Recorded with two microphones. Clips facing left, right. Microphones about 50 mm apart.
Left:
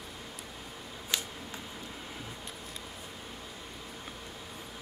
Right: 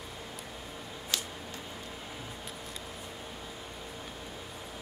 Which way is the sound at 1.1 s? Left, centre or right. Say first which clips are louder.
Left 1 dB; centre.